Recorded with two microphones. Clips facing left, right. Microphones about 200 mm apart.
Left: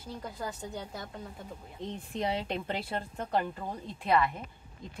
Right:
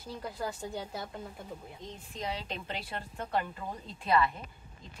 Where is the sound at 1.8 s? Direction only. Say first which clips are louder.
Left 6 dB; 60° left (ahead or behind).